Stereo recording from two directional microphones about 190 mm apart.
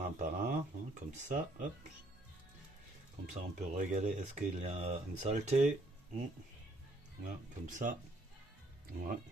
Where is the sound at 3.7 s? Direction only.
40° right (ahead or behind).